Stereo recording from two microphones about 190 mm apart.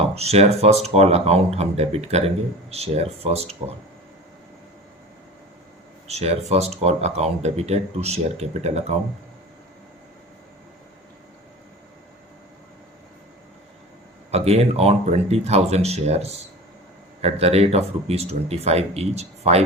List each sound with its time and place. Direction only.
0.1 s speech: 35° right (ahead or behind)
6.1 s speech: 35° right (ahead or behind)
14.3 s speech: 35° right (ahead or behind)